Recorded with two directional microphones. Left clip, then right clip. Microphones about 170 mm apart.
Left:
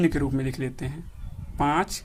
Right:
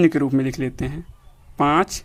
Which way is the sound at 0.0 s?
35° right (ahead or behind).